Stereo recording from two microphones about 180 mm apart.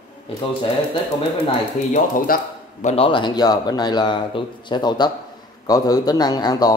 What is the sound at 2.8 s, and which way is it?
A man's voice, 30° left (ahead or behind).